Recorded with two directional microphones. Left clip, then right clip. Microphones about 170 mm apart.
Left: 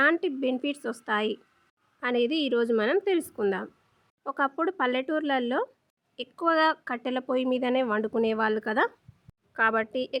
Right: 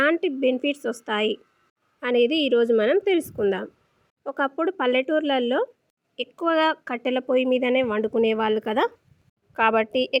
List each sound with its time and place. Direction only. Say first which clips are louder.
0.0 s a woman's voice: right 3 dB; 10° right (ahead or behind)